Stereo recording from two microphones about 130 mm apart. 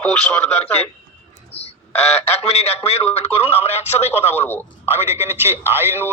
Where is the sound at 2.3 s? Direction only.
55° left (ahead or behind).